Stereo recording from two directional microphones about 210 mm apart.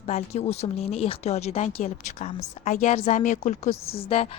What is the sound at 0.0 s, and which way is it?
A woman's voice, 30° left (ahead or behind).